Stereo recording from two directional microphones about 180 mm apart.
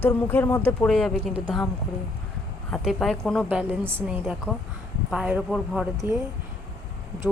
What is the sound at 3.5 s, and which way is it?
Speech, 10° right (ahead or behind).